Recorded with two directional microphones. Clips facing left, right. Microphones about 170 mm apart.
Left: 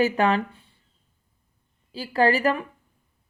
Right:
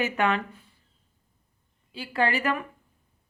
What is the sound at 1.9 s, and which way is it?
Speech, 35° left (ahead or behind).